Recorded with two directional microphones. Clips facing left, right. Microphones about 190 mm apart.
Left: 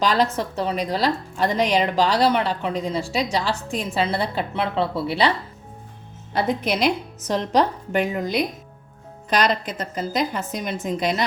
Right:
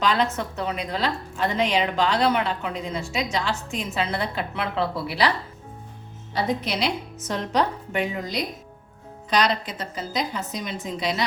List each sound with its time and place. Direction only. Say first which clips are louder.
0.0 s a woman's voice: left 3 dB; 40° left (ahead or behind)
6.3 s a woman's voice: left 3 dB; 50° left (ahead or behind)
9.7 s a woman's voice: left 4 dB; 50° left (ahead or behind)